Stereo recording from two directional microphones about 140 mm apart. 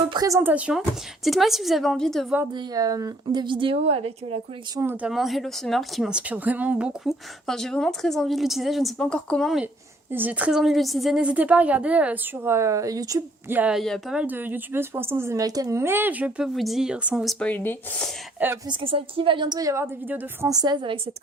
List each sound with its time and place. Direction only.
0.1 s speech: 25° right (ahead or behind); by 2.2 s 5° left (ahead or behind)
2.5 s speech: 30° right (ahead or behind)
4.8 s a woman's voice: 15° right (ahead or behind)
5.1 s speech: centre (ahead or behind)
10.1 s a woman's voice: 15° right (ahead or behind)
13.6 s speech: 5° right (ahead or behind)
14.2 s a woman's voice: 15° right (ahead or behind)
17.4 s speech: 15° left (ahead or behind)
18.3 s a woman's voice: 15° right (ahead or behind)
18.7 s speech: 40° right (ahead or behind); by 20.5 s 15° right (ahead or behind)
20.5 s speech: 30° right (ahead or behind)